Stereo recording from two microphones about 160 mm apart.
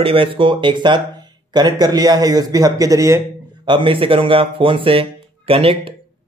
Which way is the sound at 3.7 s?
30° right (ahead or behind).